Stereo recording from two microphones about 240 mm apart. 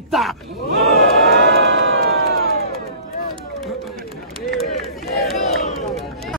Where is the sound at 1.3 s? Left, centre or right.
Right.